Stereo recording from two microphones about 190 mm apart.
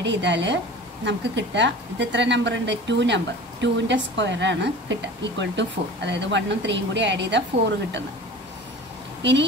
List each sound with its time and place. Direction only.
0.0 s a woman's voice: 70° right (ahead or behind)
9.2 s a woman's voice: 70° right (ahead or behind)